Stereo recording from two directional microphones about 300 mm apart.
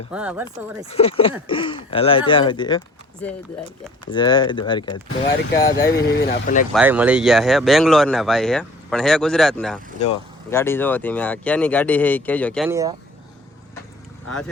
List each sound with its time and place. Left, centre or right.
0.1 s speech: centre
0.9 s speech: centre
5.8 s speech: left
6.7 s speech: centre
10.0 s speech: centre
12.7 s speech: centre